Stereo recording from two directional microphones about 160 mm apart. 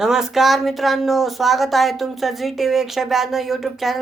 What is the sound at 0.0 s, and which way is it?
Speech, 5° right (ahead or behind).